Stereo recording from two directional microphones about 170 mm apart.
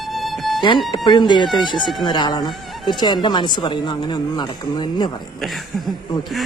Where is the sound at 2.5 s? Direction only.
Centre (ahead or behind).